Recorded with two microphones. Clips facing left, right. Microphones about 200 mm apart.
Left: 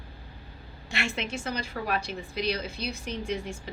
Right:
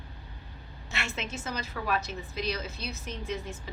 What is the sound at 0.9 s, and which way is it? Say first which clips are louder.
A woman's voice: left 4 dB; 30° left (ahead or behind).